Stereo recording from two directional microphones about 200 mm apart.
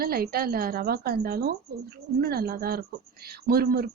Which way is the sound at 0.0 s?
50° right (ahead or behind).